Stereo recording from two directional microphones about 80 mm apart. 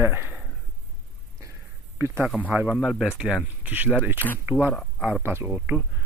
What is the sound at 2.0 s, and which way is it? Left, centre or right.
Speech, right.